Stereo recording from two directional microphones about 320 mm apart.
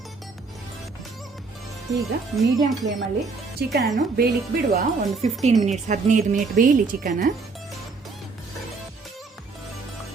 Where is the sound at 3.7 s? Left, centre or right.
Right.